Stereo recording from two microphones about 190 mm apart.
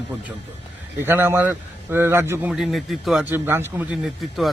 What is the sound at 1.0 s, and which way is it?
A man's voice, 10° right (ahead or behind).